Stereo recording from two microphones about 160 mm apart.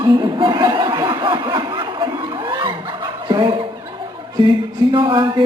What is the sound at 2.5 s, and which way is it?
Snicker, 30° right (ahead or behind).